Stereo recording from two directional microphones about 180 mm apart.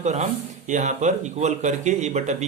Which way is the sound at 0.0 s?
40° right (ahead or behind).